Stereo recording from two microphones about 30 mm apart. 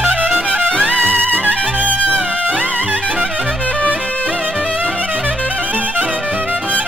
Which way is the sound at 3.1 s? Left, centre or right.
Right.